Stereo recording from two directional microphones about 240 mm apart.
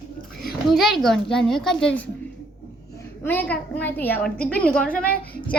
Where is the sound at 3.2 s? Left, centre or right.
Centre.